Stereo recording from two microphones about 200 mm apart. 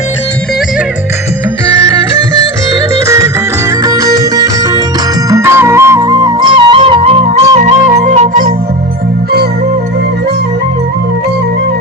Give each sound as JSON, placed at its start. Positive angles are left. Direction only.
{"t": 2.9, "sound": "music", "side_deg": -15}